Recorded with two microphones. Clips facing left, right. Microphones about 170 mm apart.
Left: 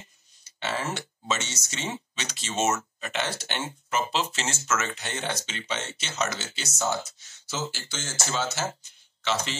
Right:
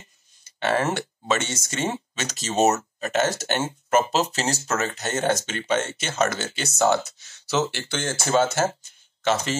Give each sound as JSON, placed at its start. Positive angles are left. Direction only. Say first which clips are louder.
{"t": 0.4, "sound": "speech", "louder": "right 8 dB", "side_deg": -55}